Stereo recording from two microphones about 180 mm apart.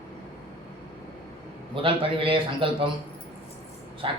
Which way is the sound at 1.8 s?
30° right (ahead or behind).